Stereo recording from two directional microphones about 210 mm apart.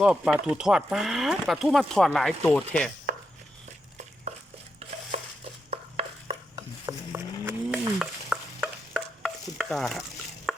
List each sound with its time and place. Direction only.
0.0 s speech: 5° right (ahead or behind)
5.1 s a sound: 30° right (ahead or behind)
5.7 s stir: 30° right (ahead or behind)
6.6 s stir: 15° right (ahead or behind)
10.5 s chopping: centre (ahead or behind)